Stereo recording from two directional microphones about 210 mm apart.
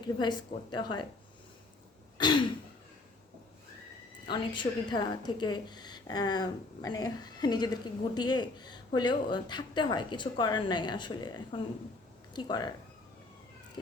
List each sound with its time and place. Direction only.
0.2 s a woman's voice: 20° left (ahead or behind)
2.1 s throat clearing: 20° left (ahead or behind)
4.3 s a woman's voice: 20° left (ahead or behind)